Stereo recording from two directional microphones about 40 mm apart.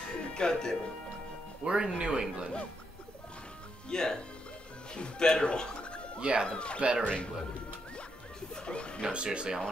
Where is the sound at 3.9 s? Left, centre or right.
Centre.